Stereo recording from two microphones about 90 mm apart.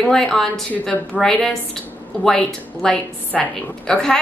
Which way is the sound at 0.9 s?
15° left (ahead or behind).